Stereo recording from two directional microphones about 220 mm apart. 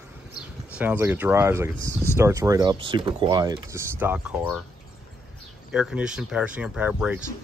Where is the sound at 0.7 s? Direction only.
5° right (ahead or behind).